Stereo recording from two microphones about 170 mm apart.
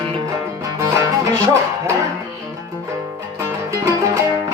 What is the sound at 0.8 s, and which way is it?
Music, 20° right (ahead or behind).